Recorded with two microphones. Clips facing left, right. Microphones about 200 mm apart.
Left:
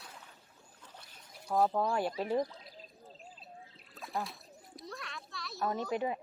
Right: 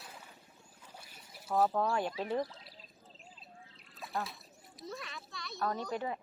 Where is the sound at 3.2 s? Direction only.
40° left (ahead or behind).